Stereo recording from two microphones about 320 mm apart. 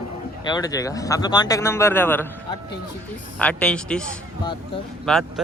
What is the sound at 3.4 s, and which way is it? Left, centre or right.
Speech, centre.